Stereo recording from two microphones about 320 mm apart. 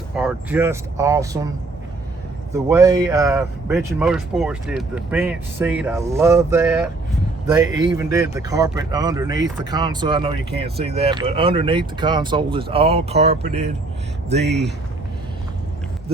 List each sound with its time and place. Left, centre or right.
0.2 s speech: centre
2.5 s speech: centre
14.4 s speech: right